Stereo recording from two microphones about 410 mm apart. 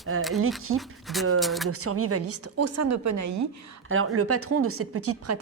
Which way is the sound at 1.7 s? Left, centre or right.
Right.